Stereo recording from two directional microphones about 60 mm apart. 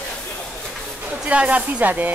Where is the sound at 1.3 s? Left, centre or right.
Right.